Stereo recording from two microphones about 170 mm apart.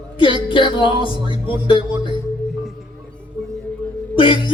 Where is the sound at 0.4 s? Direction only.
30° left (ahead or behind).